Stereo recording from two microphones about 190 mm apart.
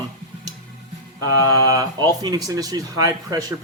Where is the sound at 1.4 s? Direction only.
20° right (ahead or behind).